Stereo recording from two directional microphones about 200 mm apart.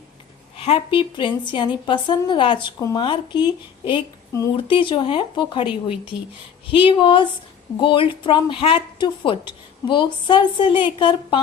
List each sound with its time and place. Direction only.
0.6 s speech: 25° left (ahead or behind)
6.7 s speech: 25° left (ahead or behind)